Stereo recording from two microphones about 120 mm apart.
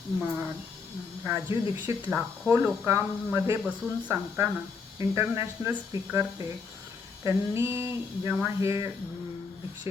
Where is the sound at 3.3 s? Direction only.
25° right (ahead or behind).